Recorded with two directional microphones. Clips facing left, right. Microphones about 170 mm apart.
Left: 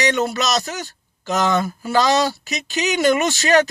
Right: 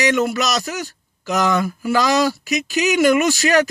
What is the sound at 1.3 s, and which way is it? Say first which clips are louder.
Speech: right 1 dB; 25° left (ahead or behind).